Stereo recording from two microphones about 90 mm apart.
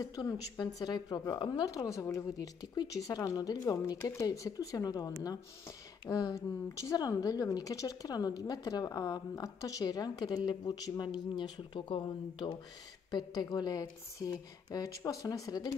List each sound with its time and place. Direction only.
0.0 s a woman's voice: 50° left (ahead or behind)
1.9 s a woman's voice: 35° left (ahead or behind)